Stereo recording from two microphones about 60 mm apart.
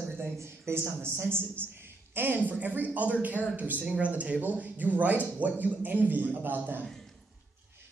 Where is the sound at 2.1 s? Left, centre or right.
Right.